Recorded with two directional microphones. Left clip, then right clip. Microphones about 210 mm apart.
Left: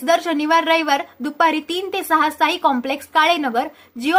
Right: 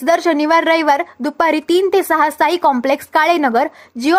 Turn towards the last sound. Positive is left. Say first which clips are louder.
# right 6 dB
turn(degrees=-40)  # may be behind; listen again after turning